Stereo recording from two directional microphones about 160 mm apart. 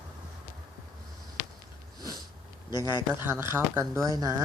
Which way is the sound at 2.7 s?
25° left (ahead or behind).